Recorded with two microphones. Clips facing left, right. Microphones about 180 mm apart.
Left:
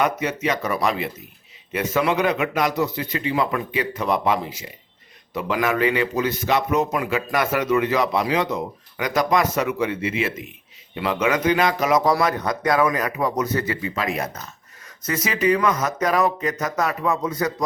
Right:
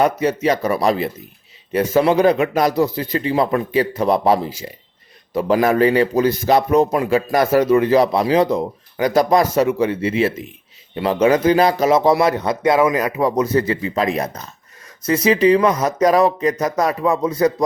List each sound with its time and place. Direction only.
0.0 s a man's voice: 35° right (ahead or behind)